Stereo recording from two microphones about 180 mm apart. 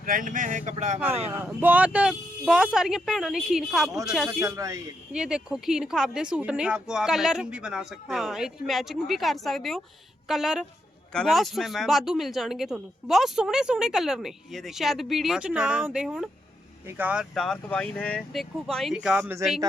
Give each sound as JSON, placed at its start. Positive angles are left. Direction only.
{"t": 0.0, "sound": "speech", "side_deg": -50}
{"t": 0.9, "sound": "speech", "side_deg": -10}
{"t": 4.4, "sound": "speech", "side_deg": -15}
{"t": 5.1, "sound": "speech", "side_deg": -5}